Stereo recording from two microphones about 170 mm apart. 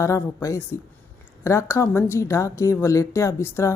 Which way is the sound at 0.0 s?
15° left (ahead or behind).